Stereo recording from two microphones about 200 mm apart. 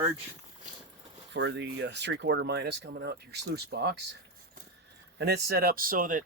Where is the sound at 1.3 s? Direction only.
60° right (ahead or behind).